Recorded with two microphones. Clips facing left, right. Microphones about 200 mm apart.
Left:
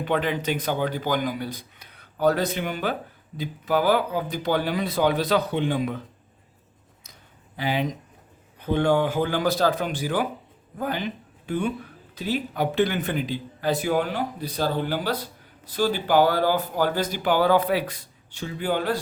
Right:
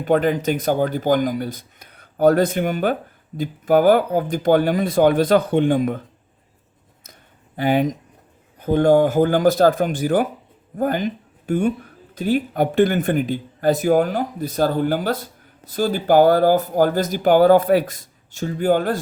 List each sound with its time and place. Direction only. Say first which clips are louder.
0.0 s speech: right 7 dB; 45° right (ahead or behind)
7.1 s a sound: right 4 dB; 50° right (ahead or behind)
8.6 s speech: right 7 dB; 45° right (ahead or behind)